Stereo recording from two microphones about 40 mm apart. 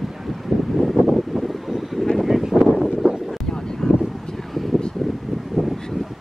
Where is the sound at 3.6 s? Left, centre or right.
Centre.